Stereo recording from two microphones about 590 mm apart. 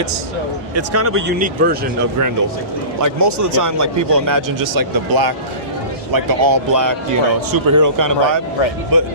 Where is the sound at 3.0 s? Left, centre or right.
Right.